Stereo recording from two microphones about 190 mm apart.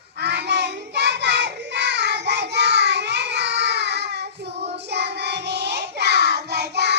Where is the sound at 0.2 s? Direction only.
65° right (ahead or behind).